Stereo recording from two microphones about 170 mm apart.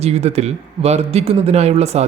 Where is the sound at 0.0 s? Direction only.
40° right (ahead or behind).